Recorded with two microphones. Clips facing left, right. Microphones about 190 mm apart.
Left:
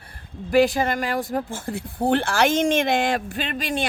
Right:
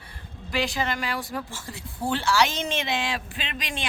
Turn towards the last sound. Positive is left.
turn(degrees=45)  # may be behind; listen again after turning